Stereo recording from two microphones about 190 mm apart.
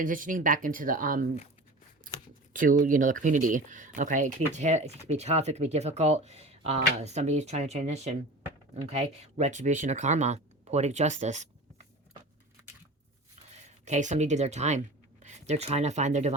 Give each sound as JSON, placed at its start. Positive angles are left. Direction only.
{"t": 0.0, "sound": "speech", "side_deg": -45}
{"t": 2.5, "sound": "speech", "side_deg": -45}
{"t": 13.5, "sound": "speech", "side_deg": -35}